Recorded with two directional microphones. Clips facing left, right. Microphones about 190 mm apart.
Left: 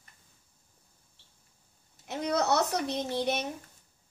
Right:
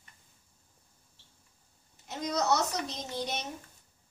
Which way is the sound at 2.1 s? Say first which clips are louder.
Left 2 dB; 60° left (ahead or behind).